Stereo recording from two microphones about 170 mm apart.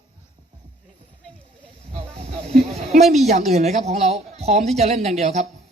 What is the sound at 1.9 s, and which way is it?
Speech, 35° right (ahead or behind).